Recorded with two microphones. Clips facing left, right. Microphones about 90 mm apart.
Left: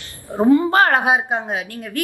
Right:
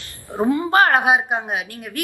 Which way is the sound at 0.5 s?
20° right (ahead or behind).